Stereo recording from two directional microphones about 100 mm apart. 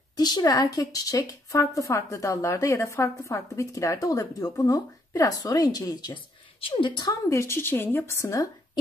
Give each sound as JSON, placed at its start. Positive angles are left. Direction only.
{"t": 0.1, "sound": "speech", "side_deg": 40}
{"t": 6.6, "sound": "a woman's voice", "side_deg": 55}
{"t": 7.1, "sound": "a woman's voice", "side_deg": 30}